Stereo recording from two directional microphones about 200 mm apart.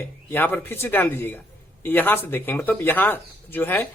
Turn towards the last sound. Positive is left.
turn(degrees=10)  # may be behind; listen again after turning